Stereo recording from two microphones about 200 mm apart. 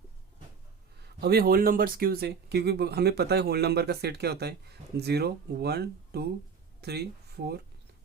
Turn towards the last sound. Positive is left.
turn(degrees=-55)  # may be behind; listen again after turning